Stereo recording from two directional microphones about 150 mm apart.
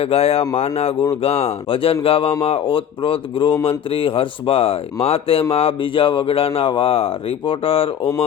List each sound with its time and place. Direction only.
0.0 s speech: 40° left (ahead or behind)